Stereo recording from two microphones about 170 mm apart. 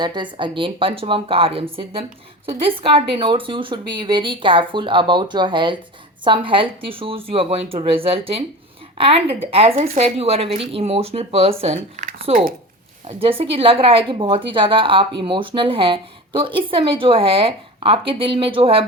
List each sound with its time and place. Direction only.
0.0 s a woman's voice: 25° right (ahead or behind)